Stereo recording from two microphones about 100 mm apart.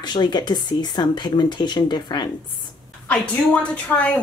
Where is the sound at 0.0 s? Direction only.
45° left (ahead or behind).